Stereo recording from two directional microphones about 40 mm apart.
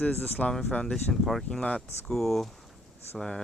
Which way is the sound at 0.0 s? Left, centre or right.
Left.